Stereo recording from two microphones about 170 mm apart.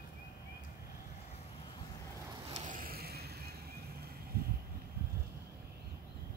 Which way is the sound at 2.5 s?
45° right (ahead or behind).